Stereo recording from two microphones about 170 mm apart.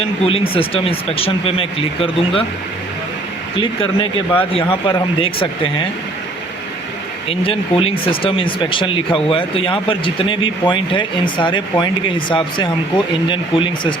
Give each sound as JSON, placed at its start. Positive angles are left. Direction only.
{"t": 0.0, "sound": "speech", "side_deg": 35}
{"t": 3.6, "sound": "speech", "side_deg": 30}
{"t": 7.3, "sound": "speech", "side_deg": 35}